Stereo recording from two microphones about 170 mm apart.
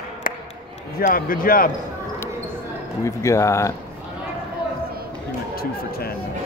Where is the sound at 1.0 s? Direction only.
55° left (ahead or behind).